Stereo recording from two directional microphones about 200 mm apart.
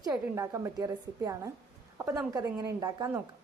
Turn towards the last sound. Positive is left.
turn(degrees=-15)  # may be behind; listen again after turning